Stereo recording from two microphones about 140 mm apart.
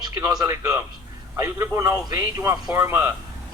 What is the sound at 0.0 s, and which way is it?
A man's voice, 25° right (ahead or behind).